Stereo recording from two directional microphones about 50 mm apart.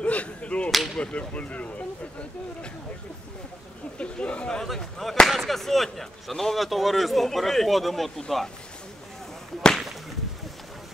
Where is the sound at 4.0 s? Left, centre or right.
Left.